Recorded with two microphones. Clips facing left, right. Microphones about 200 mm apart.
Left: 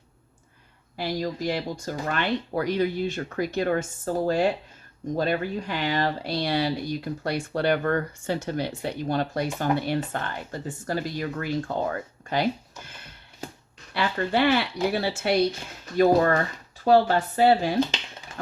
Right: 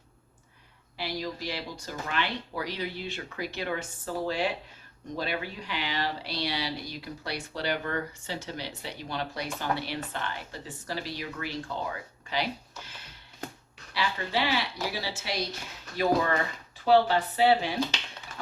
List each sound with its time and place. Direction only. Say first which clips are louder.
0.9 s speech: left 6 dB; 45° left (ahead or behind)
13.9 s speech: left 6 dB; 55° left (ahead or behind)